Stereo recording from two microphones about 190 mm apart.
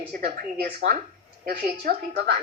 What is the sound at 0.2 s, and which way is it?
A woman's voice, 55° right (ahead or behind).